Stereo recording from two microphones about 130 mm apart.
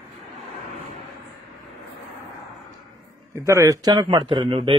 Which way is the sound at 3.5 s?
25° right (ahead or behind).